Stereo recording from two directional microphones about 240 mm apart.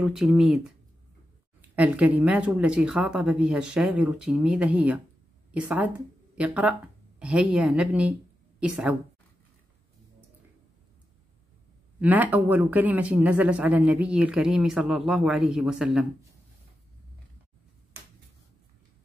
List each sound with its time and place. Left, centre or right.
0.0 s speech: centre
1.8 s speech: centre
12.0 s speech: centre